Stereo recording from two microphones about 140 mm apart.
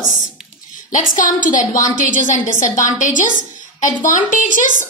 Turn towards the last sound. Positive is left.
turn(degrees=70)  # may be behind; listen again after turning